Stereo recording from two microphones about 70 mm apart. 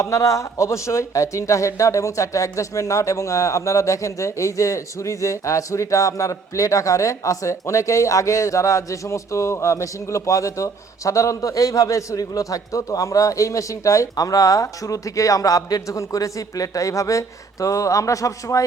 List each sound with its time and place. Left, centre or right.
0.0 s speech: left